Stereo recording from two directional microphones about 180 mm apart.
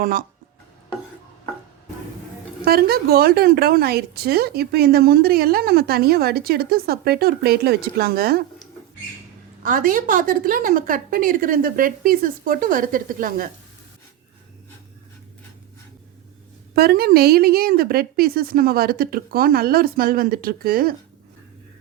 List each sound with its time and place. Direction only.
0.0 s a woman's voice: 50° right (ahead or behind)
2.6 s a woman's voice: 60° right (ahead or behind)
9.6 s a woman's voice: 50° right (ahead or behind)
16.7 s a woman's voice: 60° right (ahead or behind)